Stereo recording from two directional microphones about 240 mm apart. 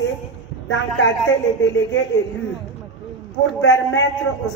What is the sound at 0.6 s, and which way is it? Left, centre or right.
Speech, left.